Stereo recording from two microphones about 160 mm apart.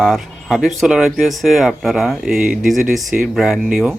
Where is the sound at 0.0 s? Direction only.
Centre (ahead or behind).